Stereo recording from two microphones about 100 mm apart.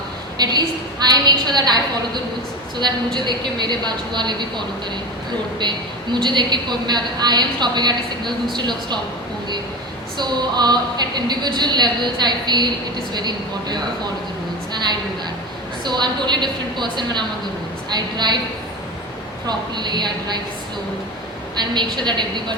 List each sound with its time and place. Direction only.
0.4 s a woman's voice: 45° right (ahead or behind)
10.2 s a woman's voice: 45° right (ahead or behind)
15.8 s a woman's voice: 45° right (ahead or behind)
19.5 s a woman's voice: 45° right (ahead or behind)
21.9 s a woman's voice: 50° right (ahead or behind)